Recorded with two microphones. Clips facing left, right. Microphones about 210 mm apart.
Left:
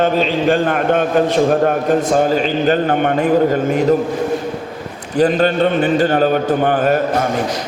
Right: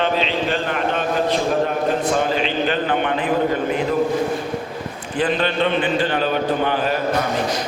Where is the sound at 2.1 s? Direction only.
45° left (ahead or behind).